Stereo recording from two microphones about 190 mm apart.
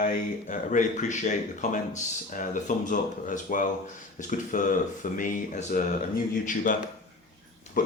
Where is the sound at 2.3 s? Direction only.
45° left (ahead or behind).